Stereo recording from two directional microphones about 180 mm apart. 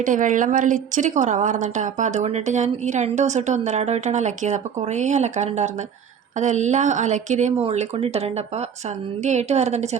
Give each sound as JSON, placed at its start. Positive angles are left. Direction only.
{"t": 0.0, "sound": "a woman's voice", "side_deg": -45}